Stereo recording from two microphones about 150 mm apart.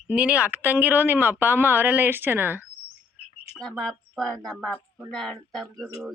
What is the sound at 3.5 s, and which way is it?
Speech, 5° left (ahead or behind).